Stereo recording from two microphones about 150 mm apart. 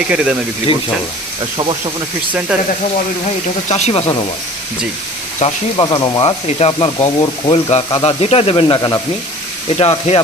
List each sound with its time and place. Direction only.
0.1 s speech: 5° right (ahead or behind)
3.7 s speech: 45° left (ahead or behind)
5.4 s speech: 50° left (ahead or behind)
5.7 s speech: 30° left (ahead or behind)